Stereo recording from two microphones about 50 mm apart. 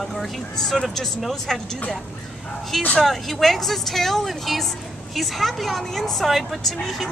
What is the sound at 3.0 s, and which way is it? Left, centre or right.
Speech, centre.